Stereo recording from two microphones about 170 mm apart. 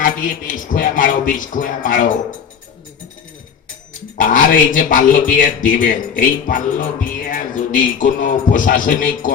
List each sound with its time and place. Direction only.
0.0 s music: 50° left (ahead or behind)
4.2 s music: 50° left (ahead or behind)